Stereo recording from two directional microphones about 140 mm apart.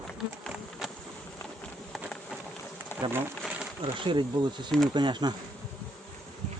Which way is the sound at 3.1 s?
15° right (ahead or behind).